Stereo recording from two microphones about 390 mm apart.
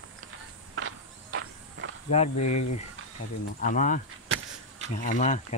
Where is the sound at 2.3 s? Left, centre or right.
Left.